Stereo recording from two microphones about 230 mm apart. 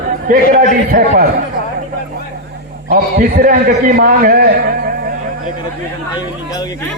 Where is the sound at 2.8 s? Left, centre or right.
Right.